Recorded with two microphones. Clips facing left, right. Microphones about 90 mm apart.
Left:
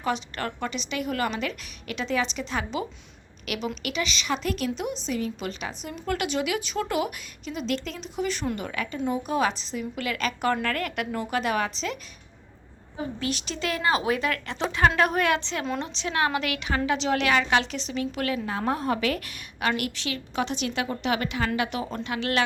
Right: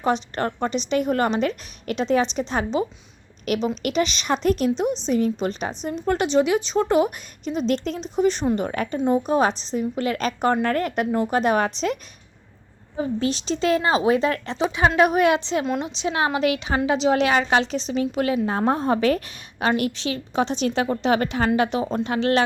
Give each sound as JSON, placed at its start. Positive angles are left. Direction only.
{"t": 0.0, "sound": "a woman's voice", "side_deg": -35}
{"t": 3.4, "sound": "a woman's voice", "side_deg": -40}
{"t": 13.0, "sound": "a woman's voice", "side_deg": -30}
{"t": 14.6, "sound": "a woman's voice", "side_deg": -10}